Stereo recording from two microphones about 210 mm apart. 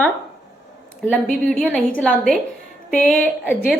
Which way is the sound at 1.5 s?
Centre (ahead or behind).